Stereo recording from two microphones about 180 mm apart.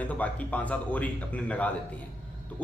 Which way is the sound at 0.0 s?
10° left (ahead or behind).